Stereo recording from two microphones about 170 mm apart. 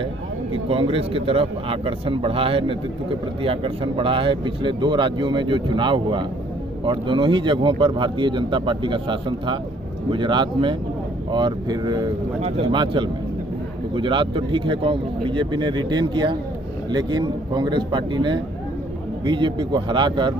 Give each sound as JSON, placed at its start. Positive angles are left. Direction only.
{"t": 0.5, "sound": "speech", "side_deg": -35}
{"t": 12.4, "sound": "speech", "side_deg": -40}
{"t": 12.8, "sound": "speech", "side_deg": -25}